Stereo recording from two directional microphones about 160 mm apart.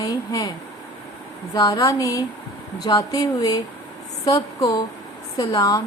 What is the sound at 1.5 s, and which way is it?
Speech, 25° left (ahead or behind).